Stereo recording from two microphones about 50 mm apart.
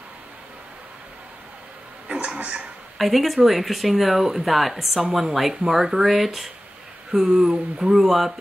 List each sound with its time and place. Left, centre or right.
2.0 s speech: right
3.0 s a woman's voice: centre